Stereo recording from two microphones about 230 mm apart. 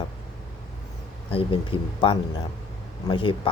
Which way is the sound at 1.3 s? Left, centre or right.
Left.